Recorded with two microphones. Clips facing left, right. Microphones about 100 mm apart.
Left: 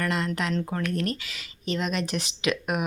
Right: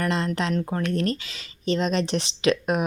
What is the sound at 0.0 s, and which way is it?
A woman's voice, 25° right (ahead or behind).